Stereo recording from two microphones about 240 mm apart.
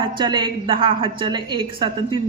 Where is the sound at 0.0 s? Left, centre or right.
Centre.